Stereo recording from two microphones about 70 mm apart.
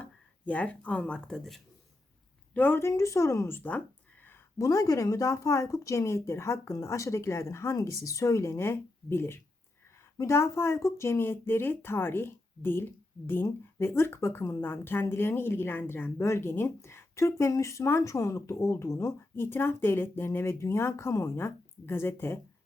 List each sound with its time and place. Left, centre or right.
0.0 s speech: left
2.5 s a woman's voice: left
2.8 s speech: left
4.5 s speech: left
7.8 s speech: left